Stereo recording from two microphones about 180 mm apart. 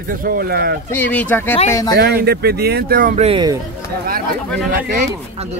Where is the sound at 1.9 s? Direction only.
60° right (ahead or behind).